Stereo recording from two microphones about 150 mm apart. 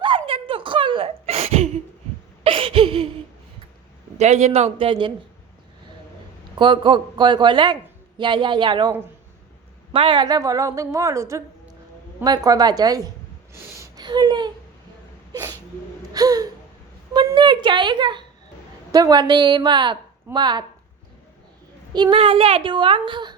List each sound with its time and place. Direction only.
0.3 s a sound: 35° right (ahead or behind)
4.2 s a man's voice: 50° right (ahead or behind)
6.6 s a woman's voice: 35° right (ahead or behind)
9.9 s a woman's voice: 35° right (ahead or behind)
13.5 s a sound: 25° right (ahead or behind)
15.3 s sneeze: 25° right (ahead or behind)
16.1 s gasp: 25° right (ahead or behind)
17.2 s a sound: 30° right (ahead or behind)
18.9 s a woman's voice: 25° right (ahead or behind)
21.9 s a woman's voice: 35° right (ahead or behind)